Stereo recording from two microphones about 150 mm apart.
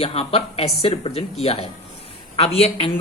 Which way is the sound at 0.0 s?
40° left (ahead or behind).